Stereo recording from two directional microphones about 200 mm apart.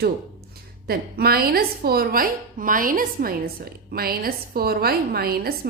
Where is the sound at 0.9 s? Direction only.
50° right (ahead or behind).